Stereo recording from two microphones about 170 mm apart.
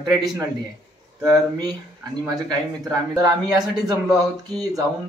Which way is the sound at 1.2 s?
20° right (ahead or behind).